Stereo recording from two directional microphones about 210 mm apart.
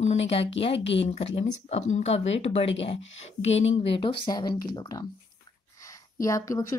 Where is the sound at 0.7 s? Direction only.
60° left (ahead or behind).